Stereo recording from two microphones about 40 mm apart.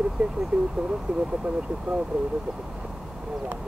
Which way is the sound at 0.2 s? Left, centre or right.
Right.